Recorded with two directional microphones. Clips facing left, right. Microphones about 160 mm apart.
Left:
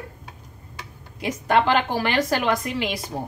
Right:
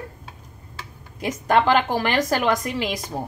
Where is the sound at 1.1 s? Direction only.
45° right (ahead or behind).